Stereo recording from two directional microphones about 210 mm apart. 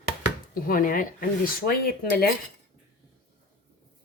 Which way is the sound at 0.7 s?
40° left (ahead or behind).